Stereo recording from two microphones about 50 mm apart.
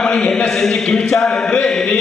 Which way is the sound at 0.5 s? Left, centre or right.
Centre.